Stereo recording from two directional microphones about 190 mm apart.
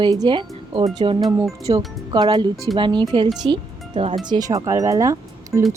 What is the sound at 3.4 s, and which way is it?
Music, 25° right (ahead or behind).